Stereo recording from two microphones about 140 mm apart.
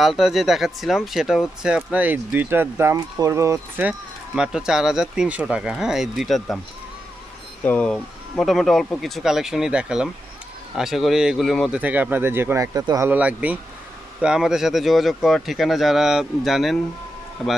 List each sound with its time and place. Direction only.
0.0 s speech: centre (ahead or behind); by 3.8 s 20° right (ahead or behind)
4.4 s speech: 5° right (ahead or behind)
7.6 s speech: 10° left (ahead or behind)
11.8 s speech: 10° right (ahead or behind)
13.1 s speech: 10° right (ahead or behind)